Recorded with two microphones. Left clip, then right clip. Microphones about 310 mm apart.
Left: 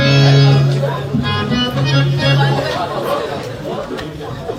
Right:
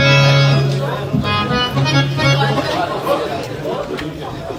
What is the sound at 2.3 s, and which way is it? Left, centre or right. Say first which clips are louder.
Chatter: even; right.